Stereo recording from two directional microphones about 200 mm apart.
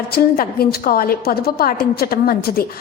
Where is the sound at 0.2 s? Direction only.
50° left (ahead or behind).